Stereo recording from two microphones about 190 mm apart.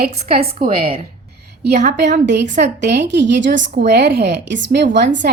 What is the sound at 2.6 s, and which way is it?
A woman's voice, 65° right (ahead or behind).